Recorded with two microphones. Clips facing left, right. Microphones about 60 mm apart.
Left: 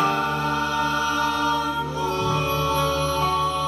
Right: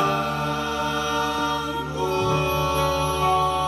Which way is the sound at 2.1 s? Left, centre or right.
Right.